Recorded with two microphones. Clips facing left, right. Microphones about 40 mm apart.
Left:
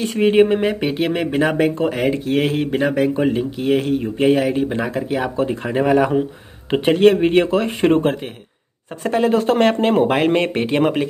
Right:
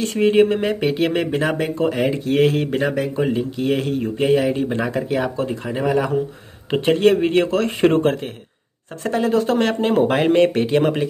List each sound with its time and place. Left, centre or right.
0.2 s speech: centre
5.3 s speech: left
7.6 s speech: centre
9.1 s speech: left